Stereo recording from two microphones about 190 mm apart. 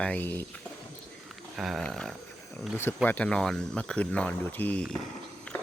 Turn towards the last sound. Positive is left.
turn(degrees=5)  # may be behind; listen again after turning